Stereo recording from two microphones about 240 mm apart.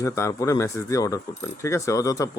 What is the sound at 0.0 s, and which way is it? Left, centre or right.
Speech, centre.